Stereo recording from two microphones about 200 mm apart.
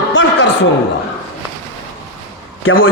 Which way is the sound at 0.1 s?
70° left (ahead or behind).